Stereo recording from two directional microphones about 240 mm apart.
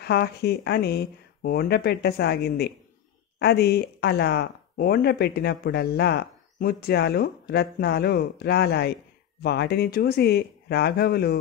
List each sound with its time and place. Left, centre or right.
0.0 s speech: left